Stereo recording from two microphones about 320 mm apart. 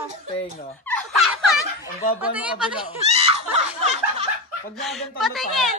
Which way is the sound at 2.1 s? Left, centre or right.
Centre.